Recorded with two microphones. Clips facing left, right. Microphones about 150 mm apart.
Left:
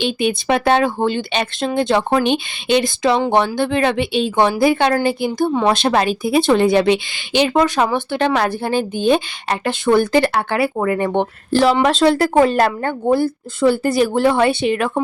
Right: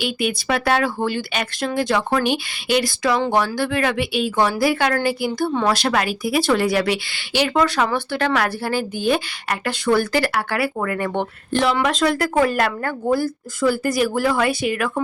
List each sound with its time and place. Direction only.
0.0 s speech: 25° left (ahead or behind)
11.5 s speech: 35° left (ahead or behind)